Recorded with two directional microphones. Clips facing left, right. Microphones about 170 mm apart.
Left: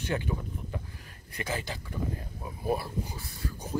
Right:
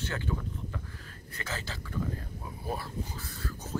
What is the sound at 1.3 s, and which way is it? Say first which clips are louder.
Speech: left 5 dB; 15° left (ahead or behind).